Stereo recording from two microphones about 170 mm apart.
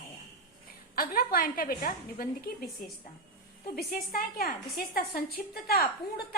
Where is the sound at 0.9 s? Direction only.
65° left (ahead or behind).